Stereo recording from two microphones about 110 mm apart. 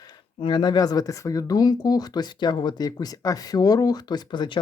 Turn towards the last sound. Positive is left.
turn(degrees=45)  # may be behind; listen again after turning